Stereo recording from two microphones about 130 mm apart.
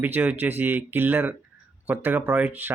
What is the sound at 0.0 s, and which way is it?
Speech, 15° right (ahead or behind).